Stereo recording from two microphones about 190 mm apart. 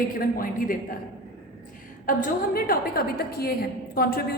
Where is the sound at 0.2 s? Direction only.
50° left (ahead or behind).